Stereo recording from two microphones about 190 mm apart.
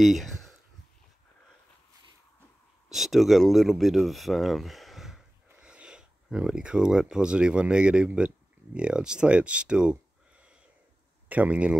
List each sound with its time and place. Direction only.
0.0 s speech: centre (ahead or behind)
2.9 s speech: centre (ahead or behind)
11.2 s speech: 10° right (ahead or behind)